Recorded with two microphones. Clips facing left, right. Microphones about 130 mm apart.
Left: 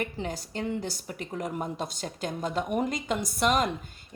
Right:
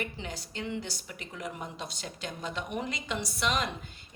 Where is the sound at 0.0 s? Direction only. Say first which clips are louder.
Left 5 dB; 45° left (ahead or behind).